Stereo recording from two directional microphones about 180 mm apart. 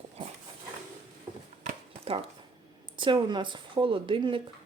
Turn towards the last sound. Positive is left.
turn(degrees=-30)  # may be behind; listen again after turning